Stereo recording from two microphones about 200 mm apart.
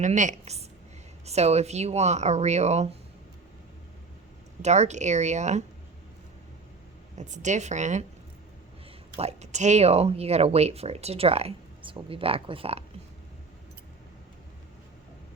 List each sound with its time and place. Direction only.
0.0 s speech: 40° right (ahead or behind)
4.6 s speech: 35° right (ahead or behind)
7.2 s speech: 35° right (ahead or behind)
9.1 s speech: 30° right (ahead or behind)